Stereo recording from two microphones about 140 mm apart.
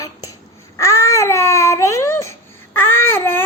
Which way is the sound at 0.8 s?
20° left (ahead or behind).